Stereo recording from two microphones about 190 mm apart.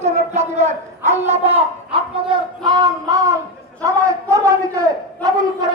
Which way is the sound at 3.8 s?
15° right (ahead or behind).